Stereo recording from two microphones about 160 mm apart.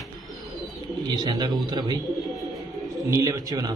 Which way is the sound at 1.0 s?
25° right (ahead or behind).